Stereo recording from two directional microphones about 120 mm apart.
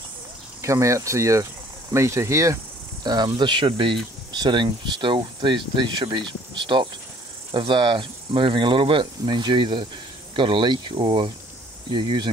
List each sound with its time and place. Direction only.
0.6 s speech: 25° right (ahead or behind)